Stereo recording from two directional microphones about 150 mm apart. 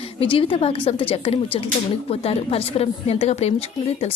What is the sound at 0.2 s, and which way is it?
A woman's voice, 40° left (ahead or behind).